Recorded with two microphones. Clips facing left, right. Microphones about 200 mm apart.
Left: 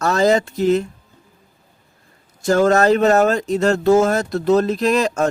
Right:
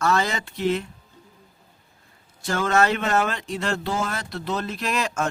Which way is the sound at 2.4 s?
40° left (ahead or behind).